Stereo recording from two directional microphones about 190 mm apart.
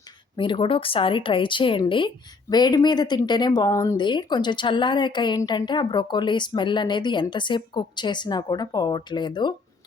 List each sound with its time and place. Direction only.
0.3 s speech: 25° left (ahead or behind)